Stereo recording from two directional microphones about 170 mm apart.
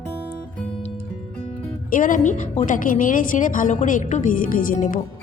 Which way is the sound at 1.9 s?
55° left (ahead or behind).